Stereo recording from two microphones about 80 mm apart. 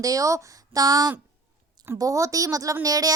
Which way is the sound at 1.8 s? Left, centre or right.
Right.